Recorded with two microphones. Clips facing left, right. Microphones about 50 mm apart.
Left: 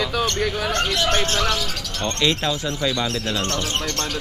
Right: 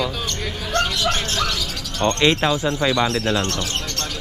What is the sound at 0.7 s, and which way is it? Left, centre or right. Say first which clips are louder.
Speech: right 4 dB; left.